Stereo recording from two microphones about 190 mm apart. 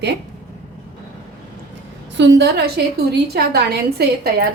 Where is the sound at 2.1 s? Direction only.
65° right (ahead or behind).